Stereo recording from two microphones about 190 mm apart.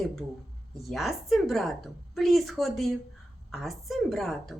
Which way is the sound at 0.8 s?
Centre (ahead or behind).